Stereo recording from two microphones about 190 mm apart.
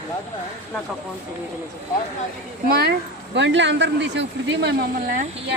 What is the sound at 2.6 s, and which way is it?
Speech, 55° right (ahead or behind).